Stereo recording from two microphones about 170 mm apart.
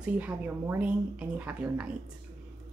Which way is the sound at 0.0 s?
10° right (ahead or behind).